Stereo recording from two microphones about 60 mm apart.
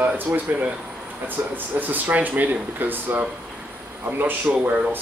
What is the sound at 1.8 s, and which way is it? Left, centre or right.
A man's voice, right.